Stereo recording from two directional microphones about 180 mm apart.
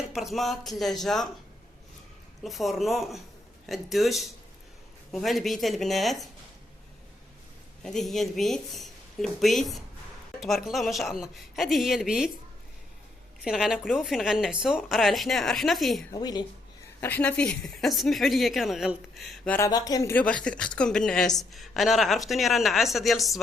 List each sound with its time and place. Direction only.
0.1 s speech: centre (ahead or behind)
2.4 s speech: centre (ahead or behind)
7.8 s a woman's voice: centre (ahead or behind)
13.4 s speech: centre (ahead or behind)
16.1 s a woman's voice: 20° left (ahead or behind)
17.0 s speech: 10° left (ahead or behind)
19.5 s speech: 20° left (ahead or behind); by 23.4 s centre (ahead or behind)